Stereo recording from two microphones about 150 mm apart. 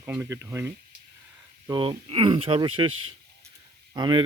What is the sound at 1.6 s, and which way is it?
Speech, 30° right (ahead or behind).